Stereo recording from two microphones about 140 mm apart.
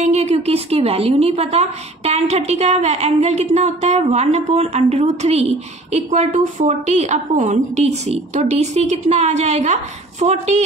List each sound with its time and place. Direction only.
0.0 s a woman's voice: 55° right (ahead or behind)